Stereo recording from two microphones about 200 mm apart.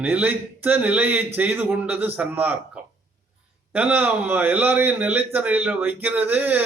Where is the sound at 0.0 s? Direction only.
10° right (ahead or behind).